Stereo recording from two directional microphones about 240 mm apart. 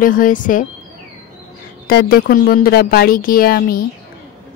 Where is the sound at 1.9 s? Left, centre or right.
Left.